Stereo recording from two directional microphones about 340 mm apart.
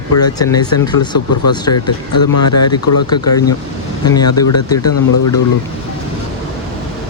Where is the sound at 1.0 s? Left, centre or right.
Left.